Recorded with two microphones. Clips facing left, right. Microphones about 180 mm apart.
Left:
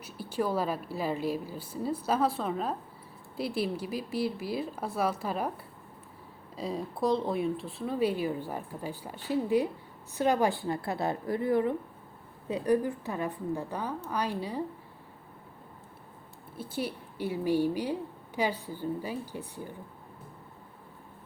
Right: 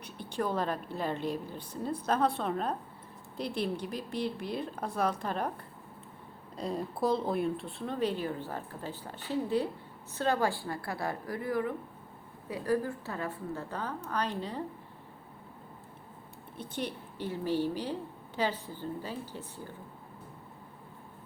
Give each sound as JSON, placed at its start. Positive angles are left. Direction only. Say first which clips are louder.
{"t": 0.0, "sound": "a woman's voice", "louder": "left 3 dB", "side_deg": 5}
{"t": 6.6, "sound": "a woman's voice", "louder": "left 1 dB", "side_deg": 0}
{"t": 16.6, "sound": "speech", "louder": "left 2 dB", "side_deg": 5}